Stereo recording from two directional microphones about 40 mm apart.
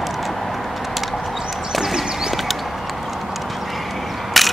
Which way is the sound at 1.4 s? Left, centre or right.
Centre.